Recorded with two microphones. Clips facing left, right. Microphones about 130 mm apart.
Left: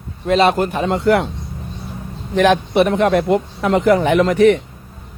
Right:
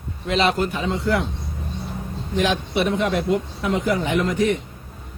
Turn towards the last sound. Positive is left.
turn(degrees=70)  # may be behind; listen again after turning